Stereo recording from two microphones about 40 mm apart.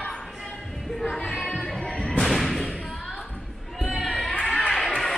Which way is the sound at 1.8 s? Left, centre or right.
Centre.